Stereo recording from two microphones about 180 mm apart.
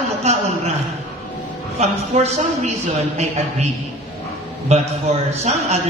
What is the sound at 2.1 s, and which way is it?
Speech, 35° right (ahead or behind).